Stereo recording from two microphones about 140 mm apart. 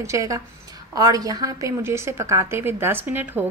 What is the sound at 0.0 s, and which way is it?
A woman's voice, 25° right (ahead or behind).